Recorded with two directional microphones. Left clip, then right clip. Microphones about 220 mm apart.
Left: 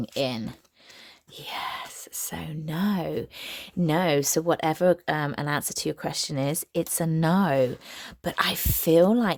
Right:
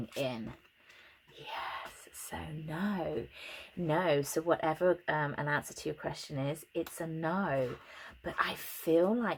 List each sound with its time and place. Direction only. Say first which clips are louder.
0.1 s speech: left 8 dB; 45° left (ahead or behind)
1.5 s whispering: left 7 dB; 45° left (ahead or behind)
2.3 s speech: left 4 dB; 40° left (ahead or behind)